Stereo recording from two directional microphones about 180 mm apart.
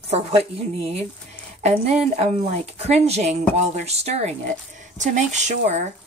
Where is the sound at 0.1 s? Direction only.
35° right (ahead or behind).